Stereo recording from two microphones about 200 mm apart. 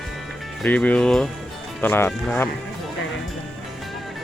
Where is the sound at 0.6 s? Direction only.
5° left (ahead or behind).